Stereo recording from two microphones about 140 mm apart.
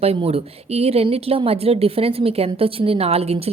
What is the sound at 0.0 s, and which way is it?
Speech, 45° right (ahead or behind).